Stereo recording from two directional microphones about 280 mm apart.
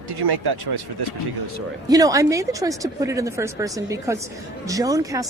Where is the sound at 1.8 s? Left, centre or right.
Centre.